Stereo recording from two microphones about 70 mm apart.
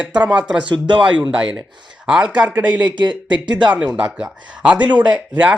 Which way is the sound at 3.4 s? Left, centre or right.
Right.